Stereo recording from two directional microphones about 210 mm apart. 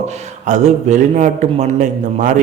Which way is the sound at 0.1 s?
35° right (ahead or behind).